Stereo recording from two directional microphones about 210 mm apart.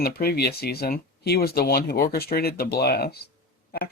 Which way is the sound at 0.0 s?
45° left (ahead or behind).